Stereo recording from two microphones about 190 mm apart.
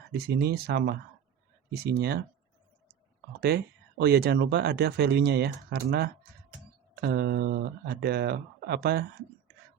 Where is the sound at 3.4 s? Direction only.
55° right (ahead or behind).